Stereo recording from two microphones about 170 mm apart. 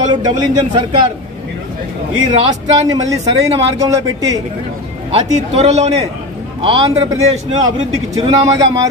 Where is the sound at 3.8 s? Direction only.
20° right (ahead or behind).